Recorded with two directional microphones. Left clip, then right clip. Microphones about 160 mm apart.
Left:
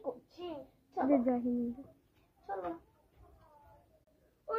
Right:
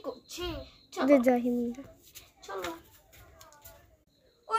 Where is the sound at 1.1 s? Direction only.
25° right (ahead or behind).